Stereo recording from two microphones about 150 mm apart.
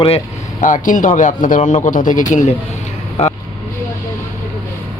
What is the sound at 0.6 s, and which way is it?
A man's voice, 60° left (ahead or behind).